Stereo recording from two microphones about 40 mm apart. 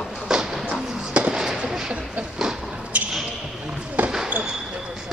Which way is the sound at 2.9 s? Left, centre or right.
Right.